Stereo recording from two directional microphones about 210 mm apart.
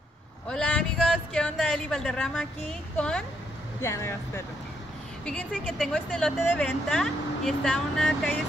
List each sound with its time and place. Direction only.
0.5 s a sound: 5° left (ahead or behind)
1.3 s a woman's voice: centre (ahead or behind)
5.2 s speech: 5° left (ahead or behind)